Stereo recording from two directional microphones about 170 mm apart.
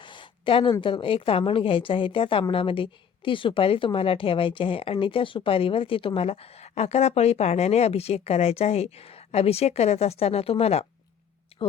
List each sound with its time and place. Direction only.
0.0 s a woman's voice: 30° left (ahead or behind)